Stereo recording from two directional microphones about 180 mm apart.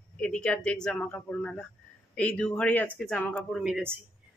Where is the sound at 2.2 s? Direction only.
5° left (ahead or behind).